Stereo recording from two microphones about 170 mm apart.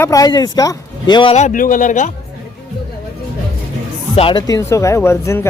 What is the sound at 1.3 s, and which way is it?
Speech, 45° left (ahead or behind).